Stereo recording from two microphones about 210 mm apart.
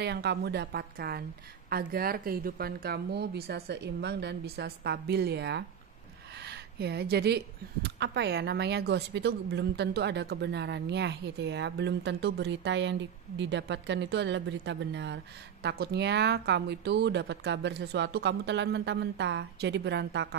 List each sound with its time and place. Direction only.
0.0 s speech: 50° right (ahead or behind)